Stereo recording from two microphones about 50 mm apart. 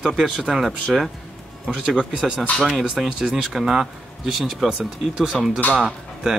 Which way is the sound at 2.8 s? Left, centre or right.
Centre.